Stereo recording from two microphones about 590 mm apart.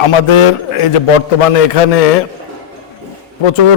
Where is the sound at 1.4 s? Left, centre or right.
Left.